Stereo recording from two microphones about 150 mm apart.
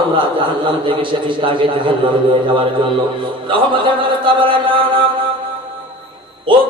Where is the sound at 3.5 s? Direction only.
35° right (ahead or behind).